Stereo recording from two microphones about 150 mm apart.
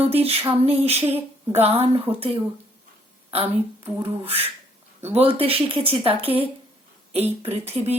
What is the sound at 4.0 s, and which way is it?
Speech, 40° right (ahead or behind).